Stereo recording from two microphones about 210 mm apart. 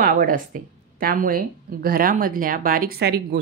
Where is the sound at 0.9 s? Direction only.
40° right (ahead or behind).